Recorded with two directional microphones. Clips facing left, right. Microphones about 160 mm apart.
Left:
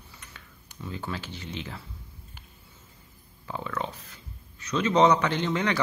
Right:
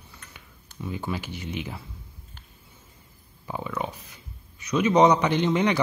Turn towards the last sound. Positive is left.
turn(degrees=-15)  # may be behind; listen again after turning